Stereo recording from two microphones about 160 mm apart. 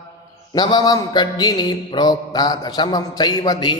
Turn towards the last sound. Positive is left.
turn(degrees=25)  # may be behind; listen again after turning